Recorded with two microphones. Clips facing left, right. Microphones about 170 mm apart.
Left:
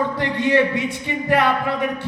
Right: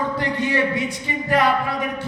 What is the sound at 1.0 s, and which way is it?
Speech, 60° left (ahead or behind).